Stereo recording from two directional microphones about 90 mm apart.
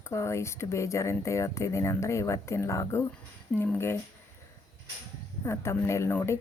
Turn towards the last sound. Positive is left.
turn(degrees=30)  # may be behind; listen again after turning